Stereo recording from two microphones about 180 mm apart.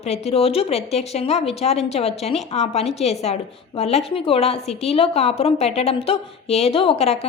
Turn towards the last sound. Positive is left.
turn(degrees=35)  # may be behind; listen again after turning